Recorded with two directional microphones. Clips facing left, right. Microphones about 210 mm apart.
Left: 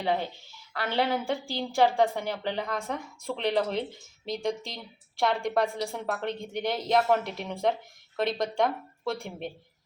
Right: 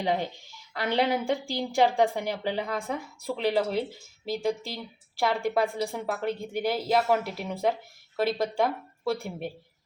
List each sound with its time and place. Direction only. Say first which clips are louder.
0.0 s a woman's voice: right 1 dB; 15° right (ahead or behind)